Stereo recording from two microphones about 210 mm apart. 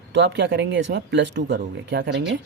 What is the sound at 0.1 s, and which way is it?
Speech, 55° right (ahead or behind).